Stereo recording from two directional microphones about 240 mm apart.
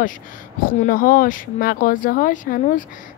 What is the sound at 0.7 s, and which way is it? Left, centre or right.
Speech, left.